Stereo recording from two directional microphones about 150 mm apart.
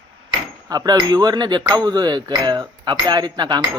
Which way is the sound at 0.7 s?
25° right (ahead or behind).